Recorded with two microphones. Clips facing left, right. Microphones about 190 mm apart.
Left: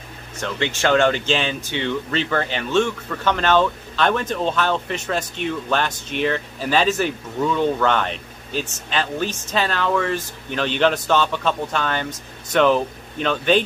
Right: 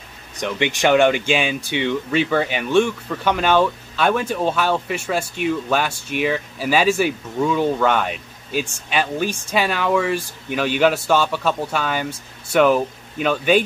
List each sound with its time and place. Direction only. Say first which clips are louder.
0.4 s speech: right 2 dB; 15° right (ahead or behind)